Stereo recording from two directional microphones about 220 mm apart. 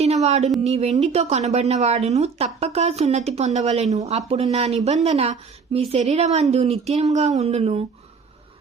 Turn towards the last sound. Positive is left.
turn(degrees=-25)  # may be behind; listen again after turning